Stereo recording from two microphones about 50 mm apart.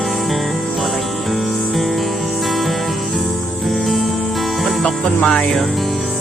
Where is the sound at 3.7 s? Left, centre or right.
Centre.